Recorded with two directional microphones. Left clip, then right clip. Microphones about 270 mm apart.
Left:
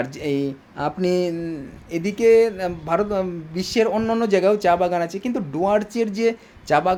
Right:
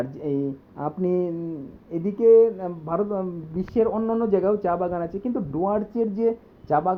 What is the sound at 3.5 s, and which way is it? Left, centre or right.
Speech, centre.